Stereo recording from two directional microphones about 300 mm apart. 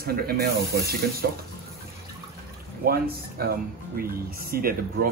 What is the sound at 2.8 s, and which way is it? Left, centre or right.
Speech, right.